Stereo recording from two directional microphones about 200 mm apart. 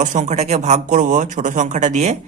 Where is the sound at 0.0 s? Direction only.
35° right (ahead or behind).